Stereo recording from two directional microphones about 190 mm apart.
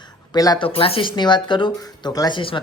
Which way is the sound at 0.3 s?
20° left (ahead or behind).